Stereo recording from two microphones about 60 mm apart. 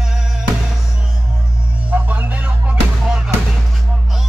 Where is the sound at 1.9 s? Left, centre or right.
Right.